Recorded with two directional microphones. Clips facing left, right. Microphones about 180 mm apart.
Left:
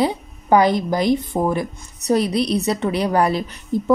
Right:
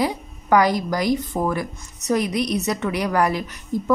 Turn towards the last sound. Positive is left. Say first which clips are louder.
# left 3 dB
turn(degrees=25)  # may be behind; listen again after turning